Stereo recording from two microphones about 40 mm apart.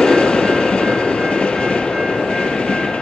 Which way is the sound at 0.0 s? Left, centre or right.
Centre.